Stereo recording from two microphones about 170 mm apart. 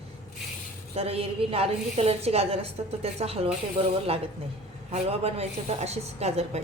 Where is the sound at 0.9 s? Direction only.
35° right (ahead or behind).